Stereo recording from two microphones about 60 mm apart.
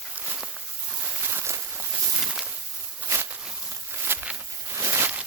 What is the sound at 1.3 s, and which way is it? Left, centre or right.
Walk, right.